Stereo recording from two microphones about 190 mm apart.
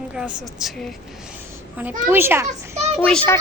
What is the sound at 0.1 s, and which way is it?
Speech, 5° right (ahead or behind).